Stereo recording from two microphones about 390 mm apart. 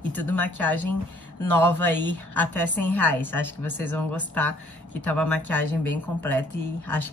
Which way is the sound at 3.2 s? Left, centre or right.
Centre.